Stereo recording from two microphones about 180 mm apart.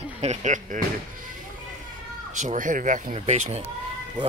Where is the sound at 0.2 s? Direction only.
40° right (ahead or behind).